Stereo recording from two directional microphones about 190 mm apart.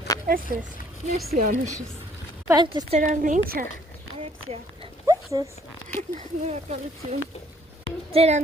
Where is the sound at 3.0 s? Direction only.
45° right (ahead or behind).